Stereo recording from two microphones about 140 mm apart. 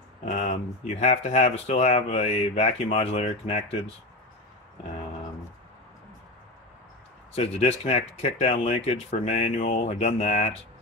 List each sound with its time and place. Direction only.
0.2 s speech: 60° left (ahead or behind)
7.3 s speech: 45° left (ahead or behind)